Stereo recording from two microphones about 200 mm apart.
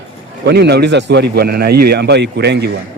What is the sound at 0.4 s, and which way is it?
Speech, 55° right (ahead or behind).